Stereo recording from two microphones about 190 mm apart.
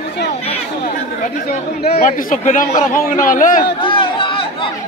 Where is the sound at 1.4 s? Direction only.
55° left (ahead or behind).